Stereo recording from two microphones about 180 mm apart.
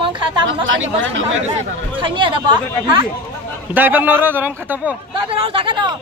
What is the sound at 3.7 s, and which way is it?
A man's voice, 10° right (ahead or behind).